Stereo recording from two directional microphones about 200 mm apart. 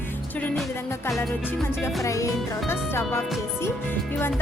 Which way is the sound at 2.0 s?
15° left (ahead or behind).